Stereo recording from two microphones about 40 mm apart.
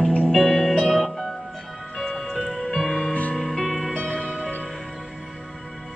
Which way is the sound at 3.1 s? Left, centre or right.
Left.